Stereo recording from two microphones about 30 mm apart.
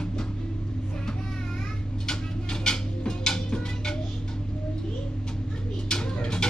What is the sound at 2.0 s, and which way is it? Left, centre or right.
Music, left.